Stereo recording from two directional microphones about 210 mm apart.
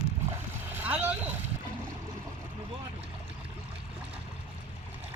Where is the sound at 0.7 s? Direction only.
10° right (ahead or behind).